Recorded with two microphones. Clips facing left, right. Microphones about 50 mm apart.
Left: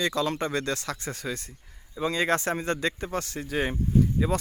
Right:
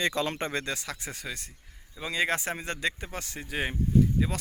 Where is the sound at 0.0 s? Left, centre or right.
Right.